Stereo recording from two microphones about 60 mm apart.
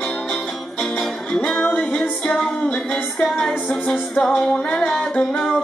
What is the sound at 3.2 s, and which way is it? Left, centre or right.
Music, centre.